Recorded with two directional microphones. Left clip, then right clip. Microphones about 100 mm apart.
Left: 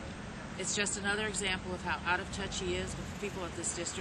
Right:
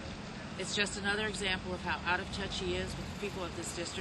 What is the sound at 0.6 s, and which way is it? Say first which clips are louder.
Speech: right 1 dB; 5° left (ahead or behind).